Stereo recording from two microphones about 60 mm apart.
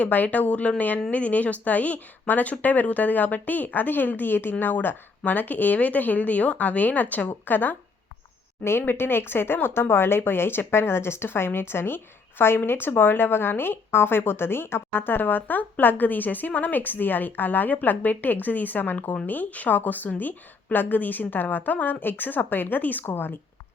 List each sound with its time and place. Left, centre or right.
0.0 s speech: left
8.8 s speech: left